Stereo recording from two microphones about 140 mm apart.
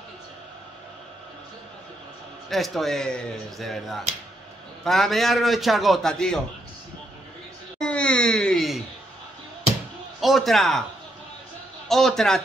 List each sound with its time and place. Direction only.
2.5 s a man's voice: centre (ahead or behind)
7.8 s a sound: 5° left (ahead or behind)
10.2 s a man's voice: centre (ahead or behind)
11.9 s a man's voice: centre (ahead or behind)